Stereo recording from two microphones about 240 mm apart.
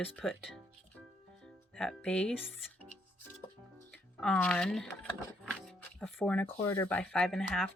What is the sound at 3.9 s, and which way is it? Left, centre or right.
Speech, centre.